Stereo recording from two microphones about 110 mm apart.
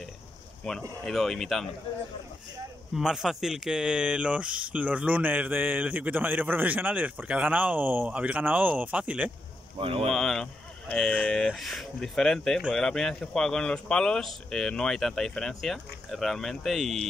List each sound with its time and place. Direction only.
0.7 s speech: 5° left (ahead or behind)
2.9 s speech: 5° right (ahead or behind)
9.8 s speech: 60° right (ahead or behind)
10.1 s speech: 5° left (ahead or behind)